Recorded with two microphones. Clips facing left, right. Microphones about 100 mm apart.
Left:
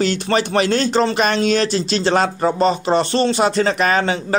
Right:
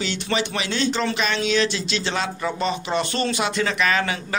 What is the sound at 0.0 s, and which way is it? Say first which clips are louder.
Speech: left 7 dB; 45° left (ahead or behind).